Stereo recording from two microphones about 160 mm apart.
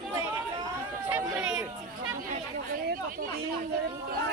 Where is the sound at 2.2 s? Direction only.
65° right (ahead or behind).